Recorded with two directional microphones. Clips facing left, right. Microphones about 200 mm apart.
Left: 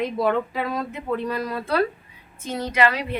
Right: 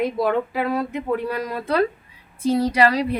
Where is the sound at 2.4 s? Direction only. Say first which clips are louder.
Right 5 dB; 35° right (ahead or behind).